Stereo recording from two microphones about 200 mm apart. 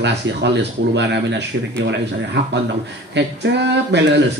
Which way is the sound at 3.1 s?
60° right (ahead or behind).